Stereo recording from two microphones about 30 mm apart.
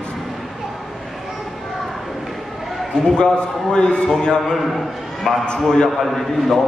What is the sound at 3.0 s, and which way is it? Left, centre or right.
A man's voice, left.